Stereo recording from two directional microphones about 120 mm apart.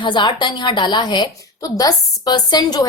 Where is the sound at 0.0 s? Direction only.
40° left (ahead or behind).